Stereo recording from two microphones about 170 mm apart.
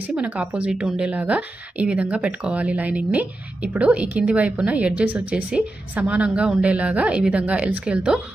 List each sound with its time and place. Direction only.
0.0 s a woman's voice: 5° right (ahead or behind)